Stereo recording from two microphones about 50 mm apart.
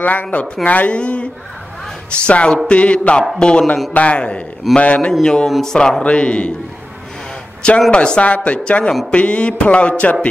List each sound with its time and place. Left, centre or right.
0.0 s a man's voice: left; by 6.0 s centre
6.0 s speech: left
7.9 s speech: centre